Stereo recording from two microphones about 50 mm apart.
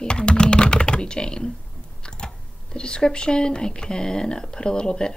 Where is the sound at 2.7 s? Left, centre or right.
Centre.